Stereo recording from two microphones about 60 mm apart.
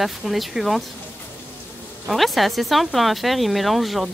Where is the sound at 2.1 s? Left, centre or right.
Centre.